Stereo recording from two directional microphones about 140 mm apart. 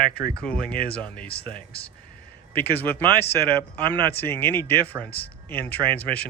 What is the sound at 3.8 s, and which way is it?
Speech, 35° right (ahead or behind).